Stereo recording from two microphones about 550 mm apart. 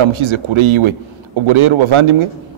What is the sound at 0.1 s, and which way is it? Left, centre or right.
A man's voice, right.